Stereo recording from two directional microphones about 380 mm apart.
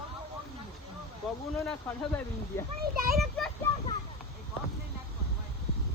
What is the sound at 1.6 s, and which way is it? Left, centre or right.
A child's voice, centre.